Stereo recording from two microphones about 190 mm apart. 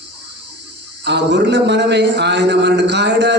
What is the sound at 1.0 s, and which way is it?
A man's voice, 65° right (ahead or behind).